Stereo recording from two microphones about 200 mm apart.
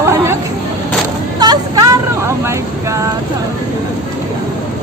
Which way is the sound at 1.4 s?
20° right (ahead or behind).